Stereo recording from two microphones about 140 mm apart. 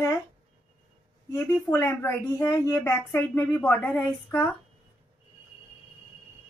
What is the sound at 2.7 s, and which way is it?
Speech, 5° left (ahead or behind).